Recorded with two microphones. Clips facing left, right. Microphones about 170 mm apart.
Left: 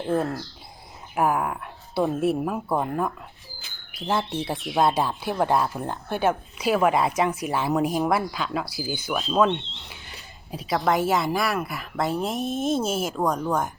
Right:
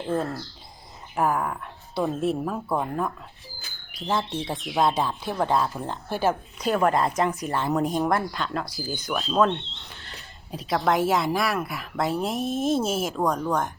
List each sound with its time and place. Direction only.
0.1 s a woman's voice: 5° left (ahead or behind)